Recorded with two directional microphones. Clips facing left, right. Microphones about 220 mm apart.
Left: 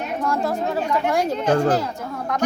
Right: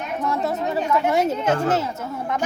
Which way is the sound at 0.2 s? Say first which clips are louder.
Left 1 dB; centre (ahead or behind).